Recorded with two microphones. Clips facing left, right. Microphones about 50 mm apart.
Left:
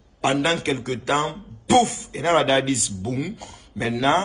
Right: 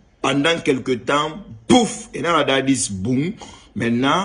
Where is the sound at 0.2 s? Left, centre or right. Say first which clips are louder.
Right 3 dB; right.